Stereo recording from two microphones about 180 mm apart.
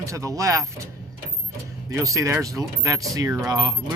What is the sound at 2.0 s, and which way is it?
Speech, 20° right (ahead or behind).